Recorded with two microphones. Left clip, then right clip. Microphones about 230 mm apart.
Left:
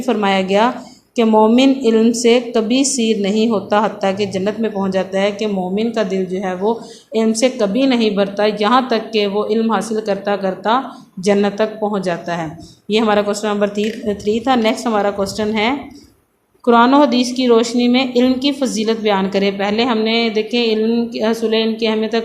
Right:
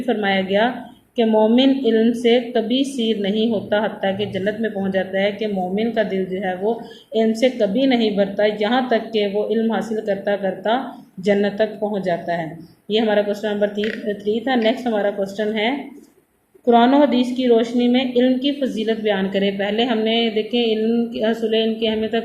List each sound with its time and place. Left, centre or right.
0.1 s speech: left